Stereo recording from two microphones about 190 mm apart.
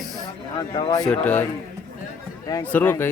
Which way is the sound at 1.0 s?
5° left (ahead or behind).